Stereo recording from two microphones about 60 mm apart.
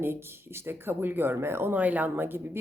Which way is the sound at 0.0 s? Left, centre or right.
Right.